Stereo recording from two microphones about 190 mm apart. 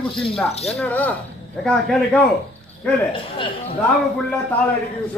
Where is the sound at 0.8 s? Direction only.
10° left (ahead or behind).